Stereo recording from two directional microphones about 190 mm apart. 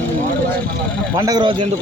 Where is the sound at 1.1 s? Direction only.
20° right (ahead or behind).